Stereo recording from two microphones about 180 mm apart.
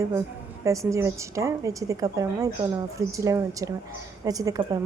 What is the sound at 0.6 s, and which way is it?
A woman's voice, 15° right (ahead or behind).